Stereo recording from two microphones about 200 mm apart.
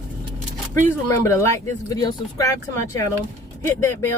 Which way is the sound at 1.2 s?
15° left (ahead or behind).